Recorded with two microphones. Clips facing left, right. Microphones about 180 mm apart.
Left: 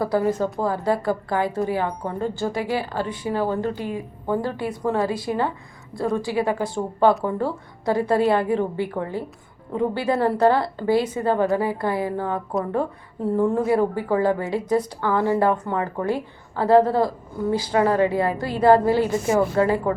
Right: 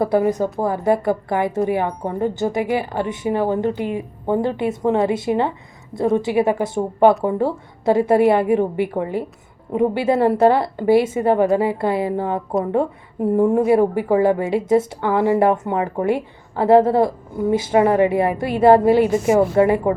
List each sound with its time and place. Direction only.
0.0 s a woman's voice: 20° right (ahead or behind)